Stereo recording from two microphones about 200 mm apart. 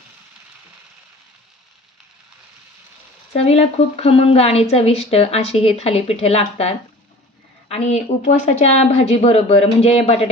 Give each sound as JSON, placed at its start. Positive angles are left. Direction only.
{"t": 3.3, "sound": "a woman's voice", "side_deg": 30}